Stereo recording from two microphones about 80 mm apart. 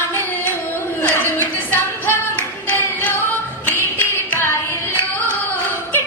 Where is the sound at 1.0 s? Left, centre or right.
Left.